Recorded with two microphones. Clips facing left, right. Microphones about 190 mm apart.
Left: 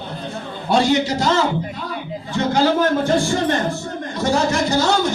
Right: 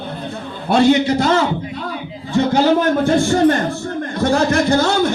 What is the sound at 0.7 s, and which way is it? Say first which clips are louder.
Speech: right 4 dB; 55° right (ahead or behind).